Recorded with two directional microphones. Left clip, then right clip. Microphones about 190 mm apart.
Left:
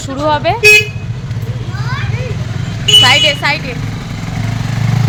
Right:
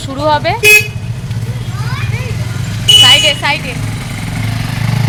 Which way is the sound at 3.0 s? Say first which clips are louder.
Right 1 dB; centre (ahead or behind).